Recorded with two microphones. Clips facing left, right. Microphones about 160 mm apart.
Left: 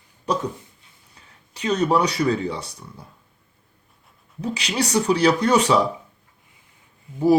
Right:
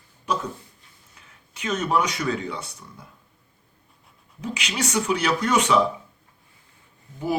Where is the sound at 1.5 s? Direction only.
35° left (ahead or behind).